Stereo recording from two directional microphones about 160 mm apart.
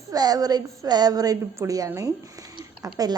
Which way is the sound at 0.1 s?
25° right (ahead or behind).